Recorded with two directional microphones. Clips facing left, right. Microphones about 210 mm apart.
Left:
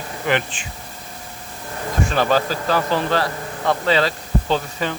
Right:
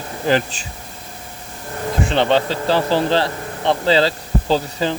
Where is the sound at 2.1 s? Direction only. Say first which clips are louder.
Right 2 dB; 25° right (ahead or behind).